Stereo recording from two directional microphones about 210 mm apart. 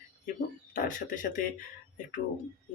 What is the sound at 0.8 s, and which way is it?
Speech, 40° left (ahead or behind).